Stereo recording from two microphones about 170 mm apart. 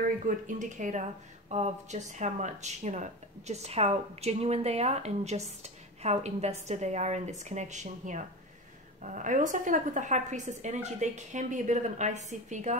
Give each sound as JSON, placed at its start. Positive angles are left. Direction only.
{"t": 0.3, "sound": "a woman's voice", "side_deg": -50}